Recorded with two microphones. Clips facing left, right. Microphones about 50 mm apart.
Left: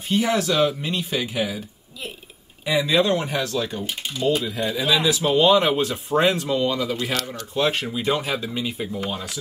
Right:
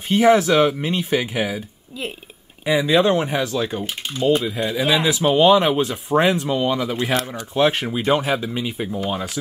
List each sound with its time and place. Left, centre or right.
0.1 s speech: right
2.6 s speech: right
3.5 s speech: right
4.5 s speech: right
5.2 s speech: centre